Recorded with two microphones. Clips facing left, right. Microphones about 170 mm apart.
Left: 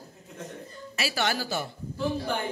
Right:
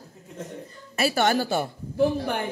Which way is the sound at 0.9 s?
50° right (ahead or behind).